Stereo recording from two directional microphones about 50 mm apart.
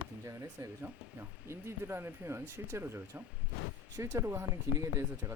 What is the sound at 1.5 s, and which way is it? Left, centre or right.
Speech, right.